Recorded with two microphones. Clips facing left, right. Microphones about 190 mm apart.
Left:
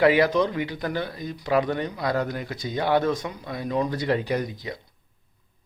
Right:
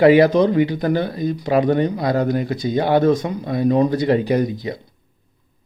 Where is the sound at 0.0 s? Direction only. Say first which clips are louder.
Right 7 dB; 25° right (ahead or behind).